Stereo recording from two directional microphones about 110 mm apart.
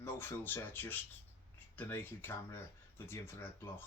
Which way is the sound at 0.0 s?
20° left (ahead or behind).